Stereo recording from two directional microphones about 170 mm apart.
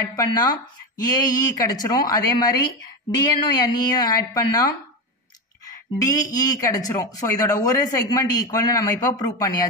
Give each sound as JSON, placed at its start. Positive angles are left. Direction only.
{"t": 0.1, "sound": "speech", "side_deg": 25}
{"t": 5.7, "sound": "speech", "side_deg": 20}